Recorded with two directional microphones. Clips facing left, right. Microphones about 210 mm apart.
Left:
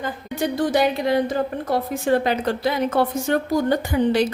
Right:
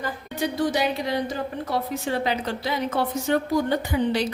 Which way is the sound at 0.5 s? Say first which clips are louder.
Left 5 dB; 55° left (ahead or behind).